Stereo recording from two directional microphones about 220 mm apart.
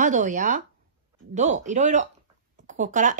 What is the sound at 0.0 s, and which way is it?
Speech, 35° right (ahead or behind).